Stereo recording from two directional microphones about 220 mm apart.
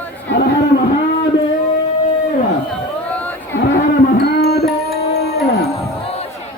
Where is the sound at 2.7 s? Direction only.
5° left (ahead or behind).